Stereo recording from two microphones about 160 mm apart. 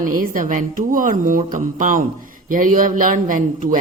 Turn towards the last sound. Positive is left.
turn(degrees=-55)  # may be behind; listen again after turning